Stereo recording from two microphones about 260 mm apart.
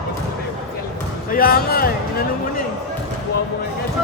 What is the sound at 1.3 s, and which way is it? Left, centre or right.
Speech, left.